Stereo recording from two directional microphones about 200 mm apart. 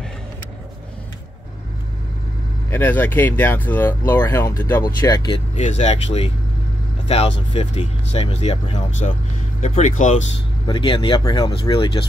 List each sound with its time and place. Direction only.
2.7 s speech: 10° left (ahead or behind)
5.6 s speech: 35° left (ahead or behind)
7.5 s speech: 30° left (ahead or behind)
10.7 s speech: 25° left (ahead or behind)